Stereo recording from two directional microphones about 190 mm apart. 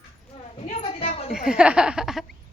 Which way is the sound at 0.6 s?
35° left (ahead or behind).